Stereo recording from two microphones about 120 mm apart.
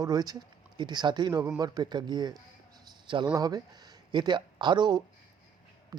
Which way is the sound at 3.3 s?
30° right (ahead or behind).